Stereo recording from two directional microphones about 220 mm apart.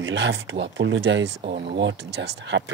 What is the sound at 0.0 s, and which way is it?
Speech, 60° right (ahead or behind).